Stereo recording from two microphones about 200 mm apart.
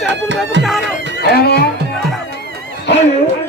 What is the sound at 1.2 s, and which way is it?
Music, 50° left (ahead or behind).